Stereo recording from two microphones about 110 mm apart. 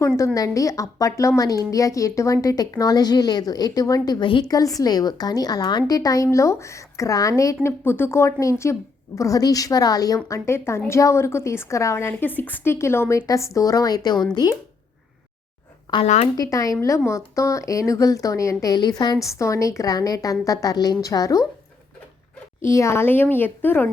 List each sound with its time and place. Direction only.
0.3 s a woman's voice: 30° left (ahead or behind); by 4.4 s 45° left (ahead or behind)
4.4 s a woman's voice: 30° left (ahead or behind)
15.9 s a woman's voice: 35° left (ahead or behind)
22.6 s a woman's voice: 25° left (ahead or behind)